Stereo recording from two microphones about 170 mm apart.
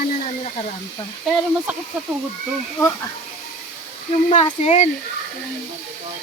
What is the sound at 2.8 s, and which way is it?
Speech, 20° left (ahead or behind).